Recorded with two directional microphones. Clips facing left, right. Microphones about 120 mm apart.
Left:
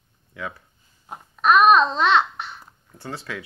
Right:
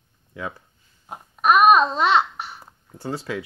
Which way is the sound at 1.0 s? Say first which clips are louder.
Even; 5° right (ahead or behind).